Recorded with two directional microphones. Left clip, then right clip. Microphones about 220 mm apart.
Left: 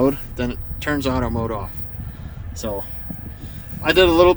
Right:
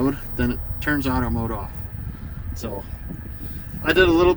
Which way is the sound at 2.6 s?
20° left (ahead or behind).